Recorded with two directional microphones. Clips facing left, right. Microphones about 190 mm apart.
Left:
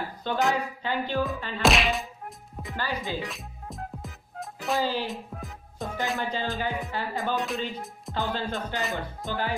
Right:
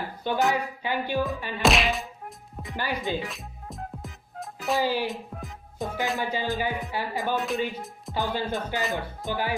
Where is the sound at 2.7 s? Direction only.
15° right (ahead or behind).